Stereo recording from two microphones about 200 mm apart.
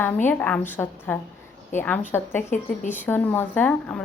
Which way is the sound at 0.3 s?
10° left (ahead or behind).